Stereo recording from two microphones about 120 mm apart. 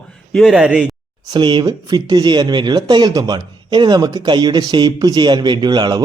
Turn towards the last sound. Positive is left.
turn(degrees=-35)  # may be behind; listen again after turning